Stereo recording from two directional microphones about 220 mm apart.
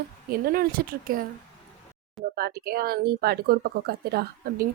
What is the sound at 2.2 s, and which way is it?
Speech, 45° right (ahead or behind).